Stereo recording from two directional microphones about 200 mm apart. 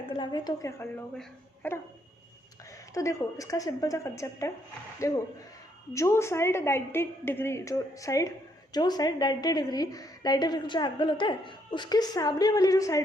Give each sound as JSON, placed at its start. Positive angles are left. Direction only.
{"t": 0.2, "sound": "a woman's voice", "side_deg": 20}
{"t": 1.1, "sound": "a woman's voice", "side_deg": 5}
{"t": 2.9, "sound": "a woman's voice", "side_deg": 15}